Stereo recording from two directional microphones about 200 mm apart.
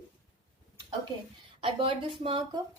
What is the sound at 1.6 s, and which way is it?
Speech, 25° right (ahead or behind).